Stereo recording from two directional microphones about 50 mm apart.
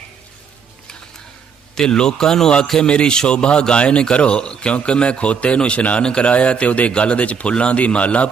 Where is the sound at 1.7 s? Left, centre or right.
Centre.